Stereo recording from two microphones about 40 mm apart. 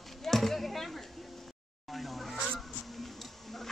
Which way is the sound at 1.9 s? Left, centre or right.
Centre.